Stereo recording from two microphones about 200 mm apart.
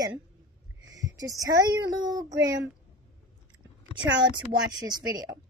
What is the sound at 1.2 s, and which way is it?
A woman's voice, 20° right (ahead or behind).